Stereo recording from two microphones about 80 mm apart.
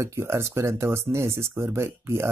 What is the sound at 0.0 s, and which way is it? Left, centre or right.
Speech, right.